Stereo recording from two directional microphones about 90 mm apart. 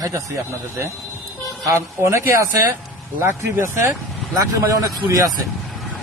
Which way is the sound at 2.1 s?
35° right (ahead or behind).